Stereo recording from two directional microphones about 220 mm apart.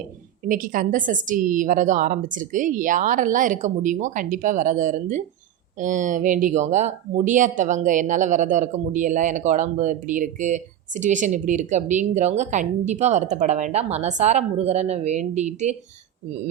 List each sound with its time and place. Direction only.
0.4 s speech: 35° right (ahead or behind)